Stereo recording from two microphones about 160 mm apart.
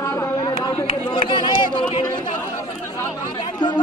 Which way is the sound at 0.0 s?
20° left (ahead or behind).